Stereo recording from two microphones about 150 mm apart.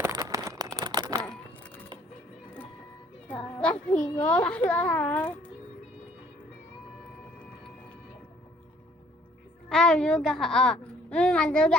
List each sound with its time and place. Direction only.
0.0 s a sound: 20° right (ahead or behind)
3.2 s a child's voice: 5° left (ahead or behind)
9.6 s a woman's voice: 5° left (ahead or behind)